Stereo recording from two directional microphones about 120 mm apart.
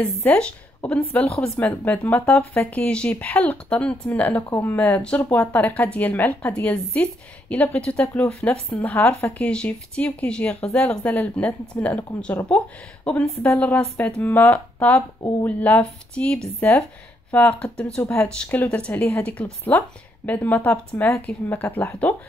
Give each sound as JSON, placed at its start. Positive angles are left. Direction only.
{"t": 0.1, "sound": "a woman's voice", "side_deg": 15}
{"t": 16.5, "sound": "speech", "side_deg": 20}